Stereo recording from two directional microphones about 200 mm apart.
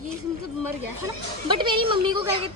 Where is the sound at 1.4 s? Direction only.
25° right (ahead or behind).